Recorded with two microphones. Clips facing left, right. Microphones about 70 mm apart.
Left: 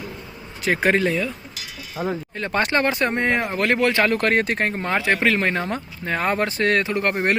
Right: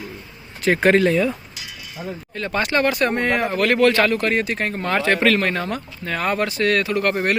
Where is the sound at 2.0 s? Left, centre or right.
Left.